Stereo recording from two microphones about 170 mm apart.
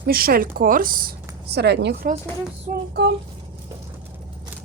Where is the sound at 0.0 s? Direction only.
60° right (ahead or behind); by 2.0 s 85° right.